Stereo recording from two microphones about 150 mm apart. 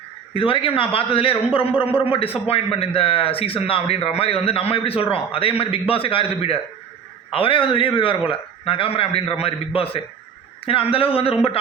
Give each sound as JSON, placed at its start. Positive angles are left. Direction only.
{"t": 0.3, "sound": "a man's voice", "side_deg": 35}